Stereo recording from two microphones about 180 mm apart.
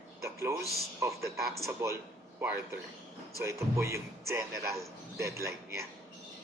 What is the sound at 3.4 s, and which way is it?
A man's voice, 15° right (ahead or behind).